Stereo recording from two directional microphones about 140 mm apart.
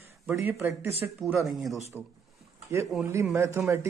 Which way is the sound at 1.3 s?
Centre (ahead or behind).